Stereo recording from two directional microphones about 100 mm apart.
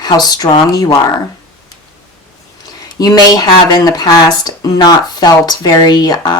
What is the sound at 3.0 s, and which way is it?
Speech, 40° left (ahead or behind).